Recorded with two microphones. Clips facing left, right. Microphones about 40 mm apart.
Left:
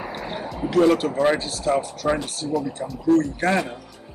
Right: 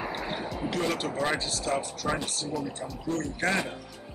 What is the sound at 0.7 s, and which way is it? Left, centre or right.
Speech, centre.